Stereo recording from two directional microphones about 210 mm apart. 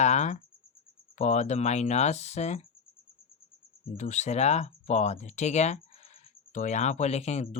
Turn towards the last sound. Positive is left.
turn(degrees=30)  # may be behind; listen again after turning